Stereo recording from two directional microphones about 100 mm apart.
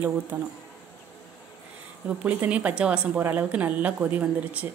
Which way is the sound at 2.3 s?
15° right (ahead or behind).